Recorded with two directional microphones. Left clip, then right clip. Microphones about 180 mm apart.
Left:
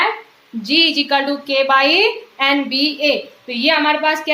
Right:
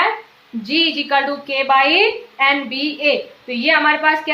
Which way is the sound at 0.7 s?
35° left (ahead or behind).